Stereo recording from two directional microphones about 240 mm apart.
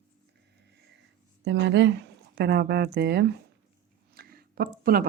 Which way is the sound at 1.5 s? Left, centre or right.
Right.